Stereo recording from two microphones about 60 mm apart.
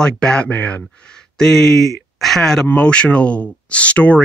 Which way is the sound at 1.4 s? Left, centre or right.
Centre.